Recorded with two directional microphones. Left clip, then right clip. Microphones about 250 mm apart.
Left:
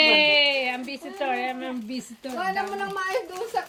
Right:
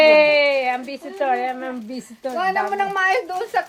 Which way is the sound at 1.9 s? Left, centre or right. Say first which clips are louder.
Right 7 dB; centre.